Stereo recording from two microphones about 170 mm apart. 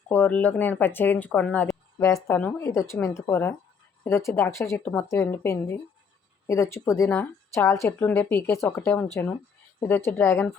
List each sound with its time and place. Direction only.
0.1 s speech: 10° left (ahead or behind)
2.0 s speech: 15° left (ahead or behind)